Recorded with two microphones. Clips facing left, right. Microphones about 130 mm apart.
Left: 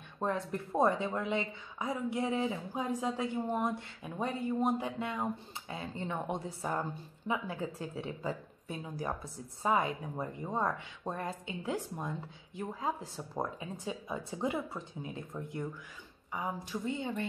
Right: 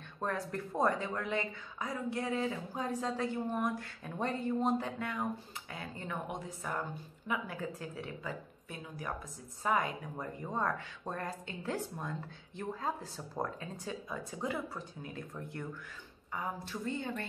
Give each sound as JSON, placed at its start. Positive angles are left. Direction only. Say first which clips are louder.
{"t": 0.2, "sound": "speech", "louder": "left 2 dB", "side_deg": 20}
{"t": 4.0, "sound": "speech", "louder": "even", "side_deg": 10}